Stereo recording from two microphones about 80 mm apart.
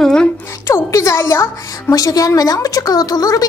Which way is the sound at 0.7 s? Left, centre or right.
Left.